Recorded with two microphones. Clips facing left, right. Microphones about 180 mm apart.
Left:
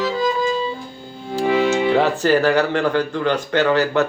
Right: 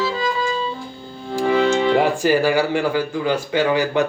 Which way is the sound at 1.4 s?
10° left (ahead or behind).